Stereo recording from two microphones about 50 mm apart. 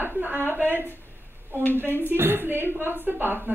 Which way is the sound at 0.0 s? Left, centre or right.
Right.